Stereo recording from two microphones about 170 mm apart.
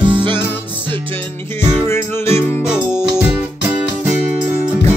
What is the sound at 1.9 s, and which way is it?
Music, 15° left (ahead or behind).